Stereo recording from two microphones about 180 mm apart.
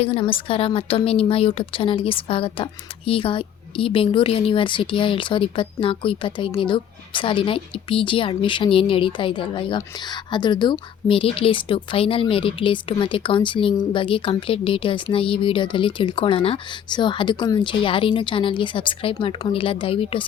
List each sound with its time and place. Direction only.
0.0 s a woman's voice: 30° left (ahead or behind)